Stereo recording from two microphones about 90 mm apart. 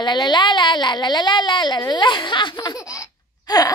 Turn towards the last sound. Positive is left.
turn(degrees=45)  # may be behind; listen again after turning